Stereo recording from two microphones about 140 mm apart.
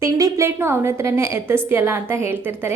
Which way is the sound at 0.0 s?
20° right (ahead or behind).